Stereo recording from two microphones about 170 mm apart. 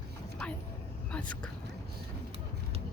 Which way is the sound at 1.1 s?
10° left (ahead or behind).